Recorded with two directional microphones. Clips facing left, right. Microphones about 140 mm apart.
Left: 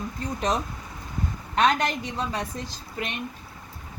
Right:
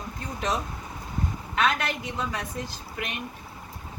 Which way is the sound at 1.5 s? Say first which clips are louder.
Left 4 dB; 40° left (ahead or behind).